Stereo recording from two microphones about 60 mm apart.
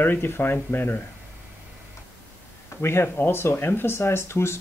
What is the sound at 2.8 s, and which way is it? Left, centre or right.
Speech, left.